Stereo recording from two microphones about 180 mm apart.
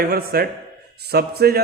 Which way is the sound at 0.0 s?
60° right (ahead or behind).